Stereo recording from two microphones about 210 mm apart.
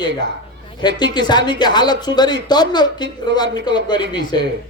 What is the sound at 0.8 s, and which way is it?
Speech, 20° left (ahead or behind).